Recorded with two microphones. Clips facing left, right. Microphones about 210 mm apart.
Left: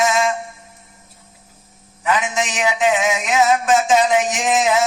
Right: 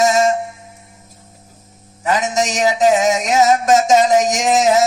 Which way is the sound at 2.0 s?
40° right (ahead or behind).